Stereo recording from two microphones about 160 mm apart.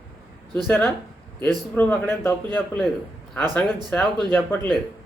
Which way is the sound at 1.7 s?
15° left (ahead or behind).